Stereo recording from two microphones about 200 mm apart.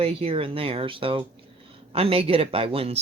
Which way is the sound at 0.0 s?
30° right (ahead or behind).